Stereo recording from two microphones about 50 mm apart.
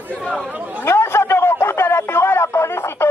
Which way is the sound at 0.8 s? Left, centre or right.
Left.